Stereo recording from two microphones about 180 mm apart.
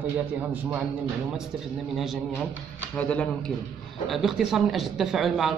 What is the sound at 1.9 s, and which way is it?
Speech, centre (ahead or behind).